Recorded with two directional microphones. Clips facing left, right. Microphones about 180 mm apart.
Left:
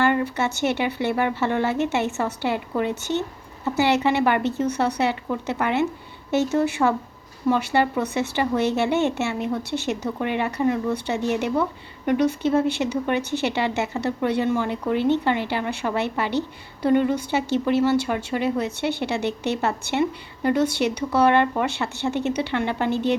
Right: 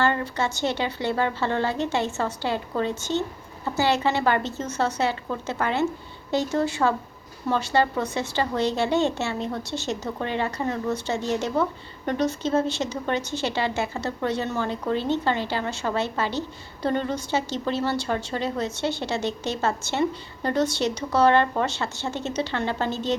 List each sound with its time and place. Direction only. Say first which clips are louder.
0.0 s speech: left 3 dB; 15° left (ahead or behind)